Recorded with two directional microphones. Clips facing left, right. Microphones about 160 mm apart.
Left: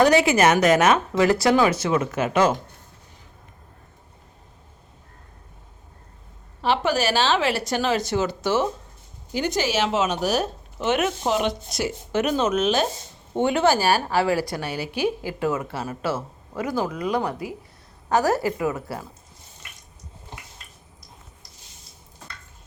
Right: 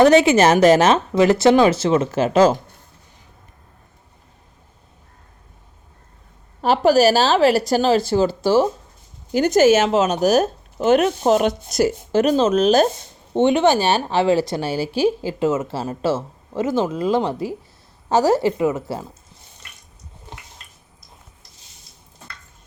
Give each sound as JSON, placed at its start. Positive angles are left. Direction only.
{"t": 0.0, "sound": "a woman's voice", "side_deg": -20}
{"t": 6.6, "sound": "speech", "side_deg": -40}
{"t": 9.3, "sound": "speech", "side_deg": -45}
{"t": 13.3, "sound": "a woman's voice", "side_deg": -20}